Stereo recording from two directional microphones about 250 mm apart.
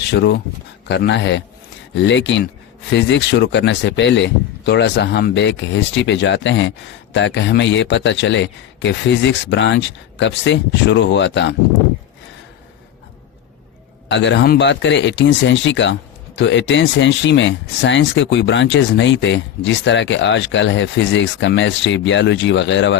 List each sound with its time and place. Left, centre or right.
0.0 s speech: left
14.1 s speech: left